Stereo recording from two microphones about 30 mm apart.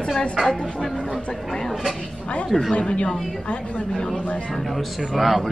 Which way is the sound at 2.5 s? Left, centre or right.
Centre.